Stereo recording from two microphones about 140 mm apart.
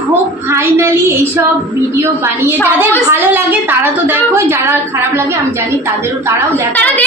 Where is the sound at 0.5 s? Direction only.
20° right (ahead or behind).